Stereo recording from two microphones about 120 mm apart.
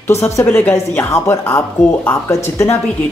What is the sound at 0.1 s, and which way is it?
Speech, 20° left (ahead or behind).